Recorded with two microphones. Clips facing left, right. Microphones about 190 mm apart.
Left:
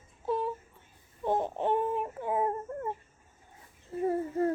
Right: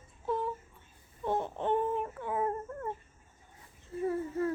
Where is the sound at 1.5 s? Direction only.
15° left (ahead or behind).